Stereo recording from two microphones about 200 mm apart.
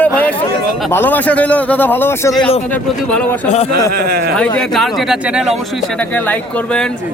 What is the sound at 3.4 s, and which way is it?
Speech, 35° left (ahead or behind).